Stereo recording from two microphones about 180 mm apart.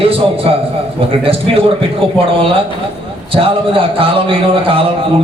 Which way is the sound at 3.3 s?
30° right (ahead or behind).